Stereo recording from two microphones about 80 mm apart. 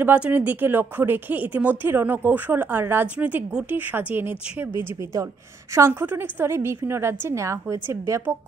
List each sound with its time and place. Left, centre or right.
0.0 s a woman's voice: centre
5.8 s a woman's voice: right